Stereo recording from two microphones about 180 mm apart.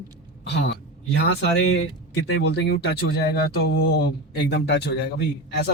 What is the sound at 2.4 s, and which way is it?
A man's voice, 70° left (ahead or behind).